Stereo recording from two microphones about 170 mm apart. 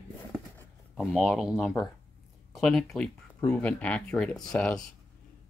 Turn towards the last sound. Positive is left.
turn(degrees=5)  # may be behind; listen again after turning